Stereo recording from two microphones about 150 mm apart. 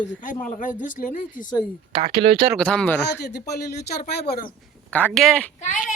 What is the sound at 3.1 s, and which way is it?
Speech, 90° left.